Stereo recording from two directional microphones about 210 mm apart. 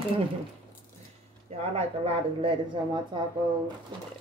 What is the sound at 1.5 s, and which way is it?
Speech, 30° right (ahead or behind).